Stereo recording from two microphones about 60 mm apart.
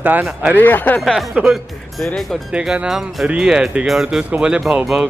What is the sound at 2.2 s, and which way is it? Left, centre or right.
Speech, centre.